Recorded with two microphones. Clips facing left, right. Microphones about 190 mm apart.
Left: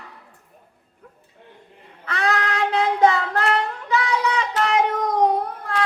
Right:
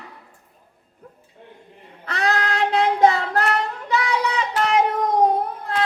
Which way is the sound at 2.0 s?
35° right (ahead or behind).